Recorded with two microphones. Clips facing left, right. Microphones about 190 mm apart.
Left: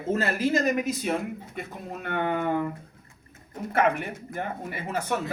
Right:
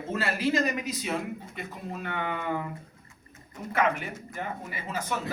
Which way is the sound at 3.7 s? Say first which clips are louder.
Left 3 dB; 50° left (ahead or behind).